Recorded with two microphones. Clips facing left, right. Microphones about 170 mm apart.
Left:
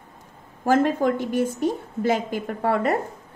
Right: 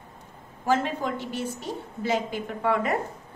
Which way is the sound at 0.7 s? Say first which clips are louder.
Left 6 dB; 50° left (ahead or behind).